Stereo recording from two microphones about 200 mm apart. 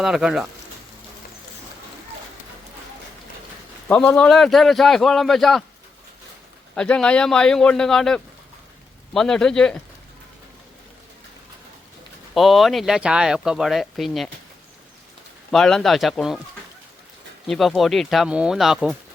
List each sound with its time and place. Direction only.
0.0 s speech: centre (ahead or behind)
3.8 s speech: 10° left (ahead or behind)
6.7 s speech: 5° left (ahead or behind)
12.3 s speech: centre (ahead or behind)
15.5 s speech: centre (ahead or behind)
17.4 s speech: centre (ahead or behind)